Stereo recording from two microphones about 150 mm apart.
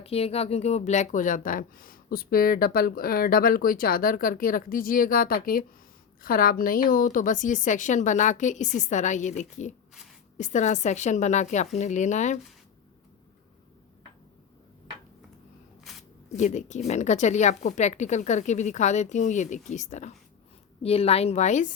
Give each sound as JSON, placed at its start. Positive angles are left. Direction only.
{"t": 0.0, "sound": "a woman's voice", "side_deg": 40}
{"t": 15.8, "sound": "a sound", "side_deg": 0}
{"t": 16.3, "sound": "speech", "side_deg": 50}
{"t": 20.8, "sound": "speech", "side_deg": 40}